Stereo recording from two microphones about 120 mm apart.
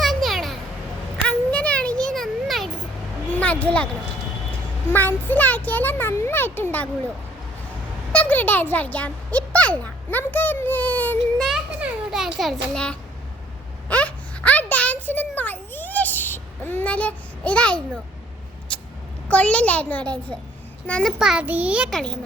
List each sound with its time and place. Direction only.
0.0 s a sound: centre (ahead or behind)
1.3 s a sound: 10° left (ahead or behind)
4.9 s a child's voice: 15° left (ahead or behind)
8.1 s speech: 15° left (ahead or behind)
11.3 s children playing: centre (ahead or behind)
11.8 s a child's voice: 5° right (ahead or behind)
13.8 s a sound: 10° left (ahead or behind)
19.3 s a child's voice: 10° left (ahead or behind)
21.2 s a child's voice: 5° right (ahead or behind)
21.8 s a child's voice: 5° left (ahead or behind)